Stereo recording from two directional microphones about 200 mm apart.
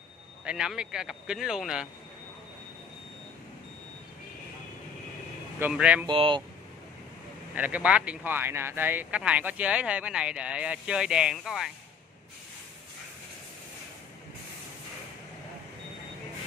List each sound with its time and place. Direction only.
0.5 s speech: 5° right (ahead or behind)
5.6 s speech: 5° right (ahead or behind)
6.0 s speech: 25° right (ahead or behind)
7.5 s speech: 5° right (ahead or behind)